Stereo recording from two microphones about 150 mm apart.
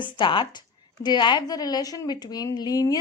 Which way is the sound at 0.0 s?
35° left (ahead or behind).